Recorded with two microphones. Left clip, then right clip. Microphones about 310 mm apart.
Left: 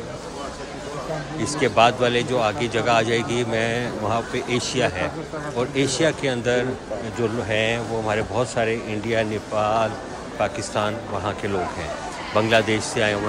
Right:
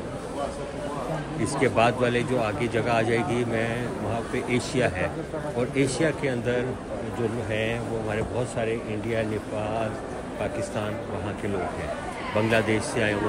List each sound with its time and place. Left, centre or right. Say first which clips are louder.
1.4 s speech: left 5 dB; centre
12.4 s speech: left 5 dB; centre